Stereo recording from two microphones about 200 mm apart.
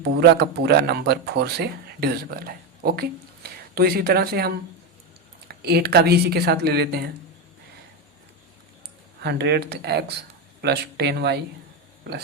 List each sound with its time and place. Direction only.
0.0 s speech: 55° right (ahead or behind)
9.2 s speech: 55° right (ahead or behind)